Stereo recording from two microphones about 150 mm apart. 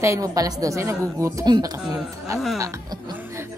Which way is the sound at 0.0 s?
20° right (ahead or behind).